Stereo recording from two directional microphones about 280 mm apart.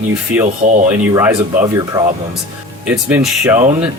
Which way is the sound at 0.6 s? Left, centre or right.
Right.